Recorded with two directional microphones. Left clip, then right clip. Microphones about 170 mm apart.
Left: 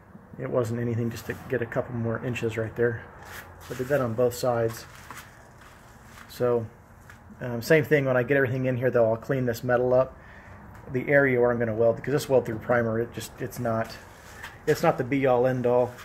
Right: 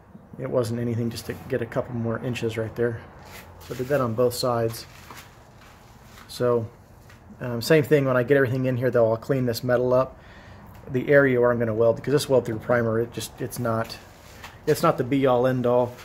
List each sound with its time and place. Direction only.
0.4 s speech: centre (ahead or behind)
3.9 s speech: 10° right (ahead or behind)
6.3 s speech: 20° right (ahead or behind)
11.8 s speech: 25° right (ahead or behind)
12.6 s speech: 15° right (ahead or behind)
14.8 s speech: 25° right (ahead or behind)